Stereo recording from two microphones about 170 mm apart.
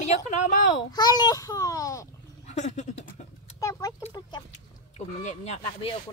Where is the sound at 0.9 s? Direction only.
25° left (ahead or behind).